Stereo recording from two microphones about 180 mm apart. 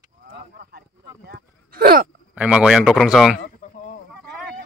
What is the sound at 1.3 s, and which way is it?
Speech, 60° right (ahead or behind).